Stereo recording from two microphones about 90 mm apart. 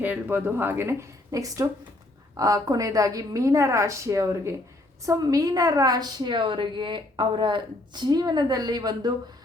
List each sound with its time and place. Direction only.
0.0 s a woman's voice: 20° right (ahead or behind); by 9.1 s 50° right (ahead or behind)